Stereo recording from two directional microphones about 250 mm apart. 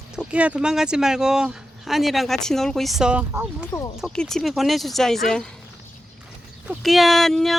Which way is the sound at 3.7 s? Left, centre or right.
Centre.